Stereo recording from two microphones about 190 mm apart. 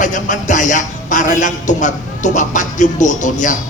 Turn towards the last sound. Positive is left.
turn(degrees=40)  # may be behind; listen again after turning